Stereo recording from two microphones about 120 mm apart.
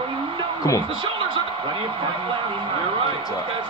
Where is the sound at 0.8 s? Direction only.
45° right (ahead or behind).